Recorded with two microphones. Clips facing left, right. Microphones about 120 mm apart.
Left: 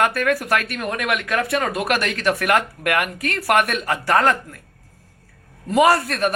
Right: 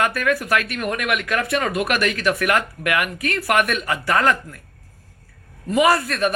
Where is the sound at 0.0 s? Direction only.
40° left (ahead or behind).